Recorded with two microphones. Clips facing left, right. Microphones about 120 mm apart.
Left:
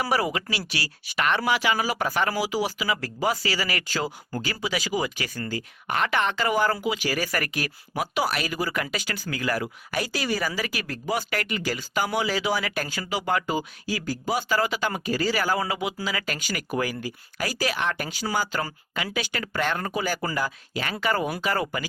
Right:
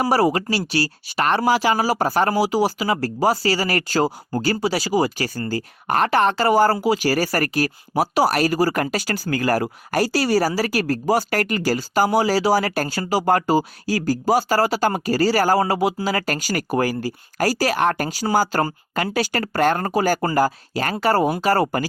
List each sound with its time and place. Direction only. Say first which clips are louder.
0.0 s speech: right 7 dB; 35° right (ahead or behind)